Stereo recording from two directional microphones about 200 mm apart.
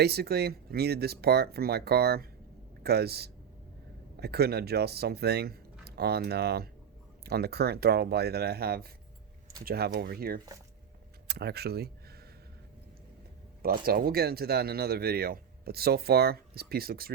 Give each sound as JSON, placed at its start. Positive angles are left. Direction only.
{"t": 0.0, "sound": "speech", "side_deg": -50}
{"t": 13.6, "sound": "speech", "side_deg": -50}